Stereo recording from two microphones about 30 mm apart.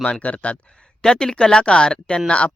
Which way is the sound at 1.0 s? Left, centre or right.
Left.